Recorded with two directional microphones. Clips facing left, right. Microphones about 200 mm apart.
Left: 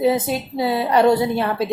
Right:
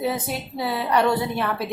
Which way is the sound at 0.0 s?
25° left (ahead or behind).